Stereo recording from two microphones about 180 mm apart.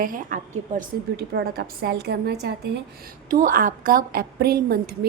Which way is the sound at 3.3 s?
50° right (ahead or behind).